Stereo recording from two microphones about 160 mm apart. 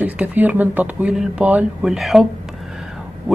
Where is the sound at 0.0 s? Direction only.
10° right (ahead or behind).